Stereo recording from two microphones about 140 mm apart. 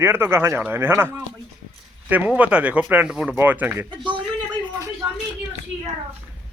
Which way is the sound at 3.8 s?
35° right (ahead or behind).